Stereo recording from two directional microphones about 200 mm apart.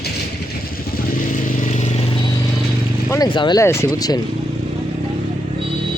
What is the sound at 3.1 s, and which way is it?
Speech, 20° left (ahead or behind).